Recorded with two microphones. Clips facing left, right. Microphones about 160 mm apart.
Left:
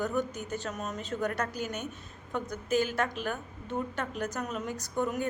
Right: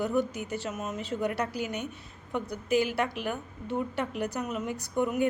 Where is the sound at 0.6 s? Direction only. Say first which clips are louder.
Right 2 dB; 5° right (ahead or behind).